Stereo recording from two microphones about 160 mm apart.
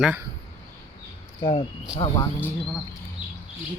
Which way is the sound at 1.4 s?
30° left (ahead or behind).